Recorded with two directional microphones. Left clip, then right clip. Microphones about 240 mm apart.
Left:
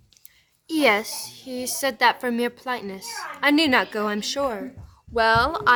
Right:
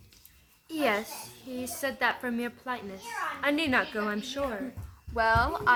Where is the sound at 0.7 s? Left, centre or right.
Left.